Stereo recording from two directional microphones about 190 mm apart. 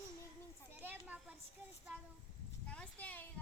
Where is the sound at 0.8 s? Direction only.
10° right (ahead or behind).